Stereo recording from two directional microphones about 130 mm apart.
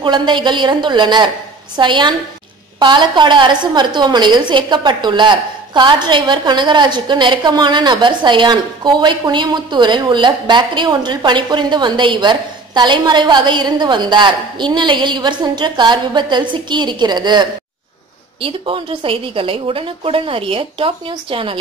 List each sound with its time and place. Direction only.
0.0 s a woman's voice: 35° right (ahead or behind)